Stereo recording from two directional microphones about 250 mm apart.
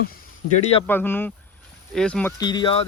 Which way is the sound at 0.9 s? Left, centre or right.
Centre.